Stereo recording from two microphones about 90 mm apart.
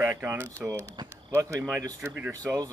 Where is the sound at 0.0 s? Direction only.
25° right (ahead or behind).